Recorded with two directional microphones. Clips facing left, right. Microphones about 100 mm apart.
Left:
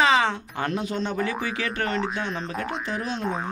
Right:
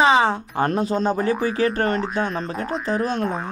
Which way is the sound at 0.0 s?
30° right (ahead or behind).